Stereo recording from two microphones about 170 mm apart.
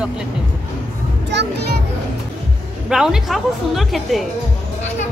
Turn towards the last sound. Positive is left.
turn(degrees=0)  # may be behind; listen again after turning